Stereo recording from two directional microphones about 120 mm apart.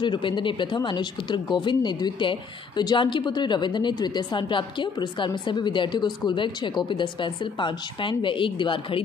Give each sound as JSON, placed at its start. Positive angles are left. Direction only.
{"t": 0.0, "sound": "a woman's voice", "side_deg": 40}